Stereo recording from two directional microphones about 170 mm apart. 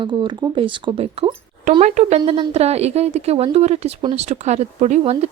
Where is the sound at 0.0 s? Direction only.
25° right (ahead or behind).